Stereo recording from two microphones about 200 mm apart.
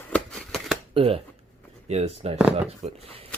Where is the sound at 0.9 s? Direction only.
30° right (ahead or behind).